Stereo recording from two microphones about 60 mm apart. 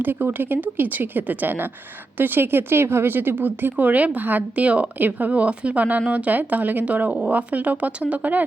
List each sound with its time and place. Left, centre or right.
0.0 s speech: right